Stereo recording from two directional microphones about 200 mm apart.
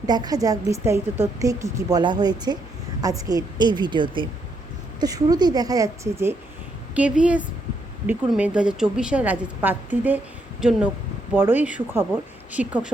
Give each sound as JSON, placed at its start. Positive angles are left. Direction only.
{"t": 0.0, "sound": "a woman's voice", "side_deg": -20}